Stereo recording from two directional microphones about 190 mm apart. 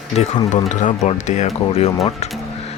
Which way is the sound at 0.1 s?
35° left (ahead or behind).